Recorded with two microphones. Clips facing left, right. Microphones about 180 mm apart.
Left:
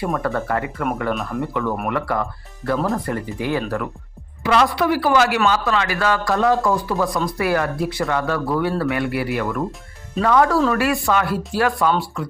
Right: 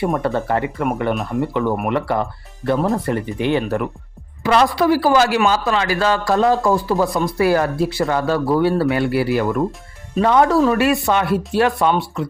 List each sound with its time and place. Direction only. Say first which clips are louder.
0.0 s speech: right 3 dB; 25° right (ahead or behind)
4.4 s speech: right 3 dB; 35° right (ahead or behind); by 12.3 s 20° right (ahead or behind)